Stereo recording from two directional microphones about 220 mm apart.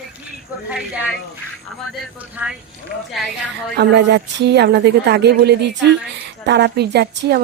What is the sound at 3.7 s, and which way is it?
A woman's voice, 50° right (ahead or behind).